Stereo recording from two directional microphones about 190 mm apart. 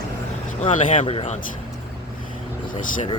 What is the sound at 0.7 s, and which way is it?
Speech, 30° left (ahead or behind).